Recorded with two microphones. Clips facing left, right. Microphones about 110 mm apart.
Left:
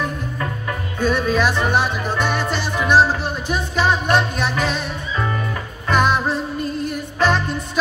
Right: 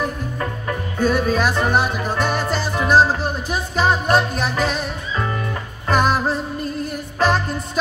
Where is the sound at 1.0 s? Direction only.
40° right (ahead or behind).